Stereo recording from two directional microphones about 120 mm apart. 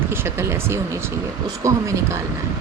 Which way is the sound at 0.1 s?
20° right (ahead or behind).